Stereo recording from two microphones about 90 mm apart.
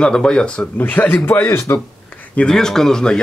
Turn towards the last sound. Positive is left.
turn(degrees=5)  # may be behind; listen again after turning